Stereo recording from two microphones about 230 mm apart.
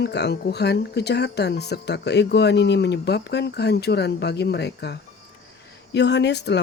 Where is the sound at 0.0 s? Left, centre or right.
Left.